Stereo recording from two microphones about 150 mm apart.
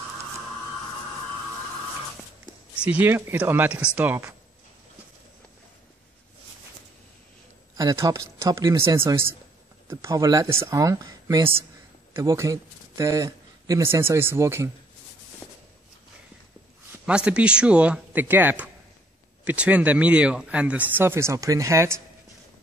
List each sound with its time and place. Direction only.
2.8 s speech: 10° right (ahead or behind)
7.7 s speech: 20° right (ahead or behind)
9.8 s a man's voice: 20° right (ahead or behind)
17.0 s speech: 5° right (ahead or behind)